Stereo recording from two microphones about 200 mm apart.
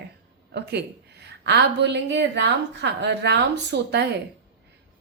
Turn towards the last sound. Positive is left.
turn(degrees=-60)  # may be behind; listen again after turning